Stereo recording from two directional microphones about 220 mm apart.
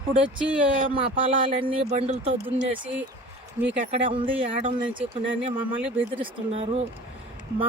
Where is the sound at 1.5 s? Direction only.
25° right (ahead or behind).